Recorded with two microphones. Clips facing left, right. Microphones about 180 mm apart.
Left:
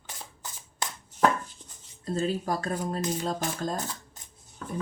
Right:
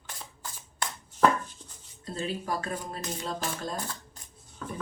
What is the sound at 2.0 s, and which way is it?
Speech, 45° left (ahead or behind).